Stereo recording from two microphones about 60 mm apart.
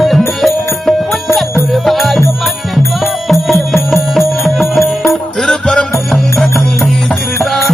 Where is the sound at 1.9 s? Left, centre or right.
Centre.